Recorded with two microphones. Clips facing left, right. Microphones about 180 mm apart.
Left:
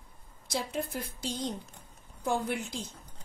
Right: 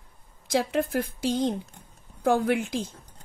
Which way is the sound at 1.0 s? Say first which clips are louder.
Right 10 dB; 50° right (ahead or behind).